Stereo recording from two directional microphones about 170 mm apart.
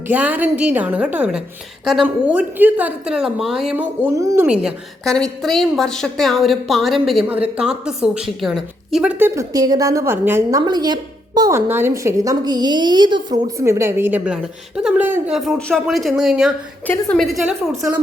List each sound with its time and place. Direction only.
0.1 s a woman's voice: 10° right (ahead or behind)
4.4 s a woman's voice: 5° right (ahead or behind)
10.7 s a woman's voice: 25° right (ahead or behind)
13.6 s a woman's voice: 15° right (ahead or behind)
16.8 s a woman's voice: 10° left (ahead or behind)